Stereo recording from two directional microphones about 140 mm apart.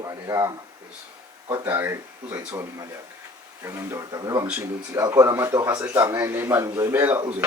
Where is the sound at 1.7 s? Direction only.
20° right (ahead or behind).